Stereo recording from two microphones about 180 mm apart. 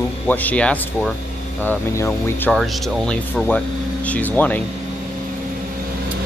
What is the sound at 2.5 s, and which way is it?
Speech, centre (ahead or behind).